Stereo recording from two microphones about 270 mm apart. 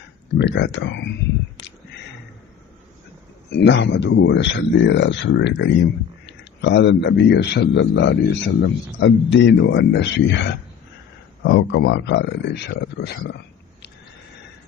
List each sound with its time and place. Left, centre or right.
0.3 s speech: left
3.5 s speech: left